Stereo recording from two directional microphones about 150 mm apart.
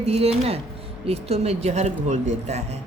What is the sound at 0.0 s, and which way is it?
A woman's voice, 40° right (ahead or behind).